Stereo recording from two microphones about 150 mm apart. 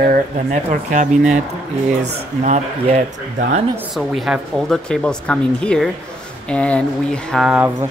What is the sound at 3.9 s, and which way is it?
Speech, centre (ahead or behind).